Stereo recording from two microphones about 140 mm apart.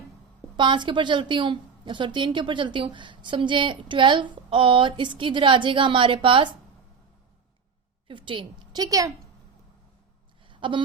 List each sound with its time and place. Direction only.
0.5 s a woman's voice: 35° right (ahead or behind)
8.0 s a woman's voice: 35° right (ahead or behind)
10.5 s a sound: 35° right (ahead or behind)